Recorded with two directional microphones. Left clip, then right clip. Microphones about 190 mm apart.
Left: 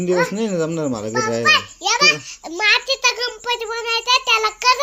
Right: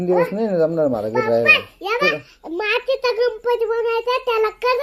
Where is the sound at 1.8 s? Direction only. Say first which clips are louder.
Left 4 dB; 40° left (ahead or behind).